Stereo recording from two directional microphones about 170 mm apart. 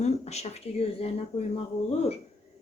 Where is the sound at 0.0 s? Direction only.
40° left (ahead or behind).